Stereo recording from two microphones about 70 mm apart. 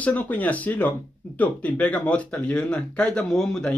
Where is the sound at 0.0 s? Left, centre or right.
Left.